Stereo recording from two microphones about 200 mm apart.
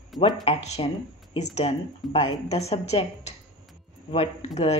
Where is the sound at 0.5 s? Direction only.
35° left (ahead or behind).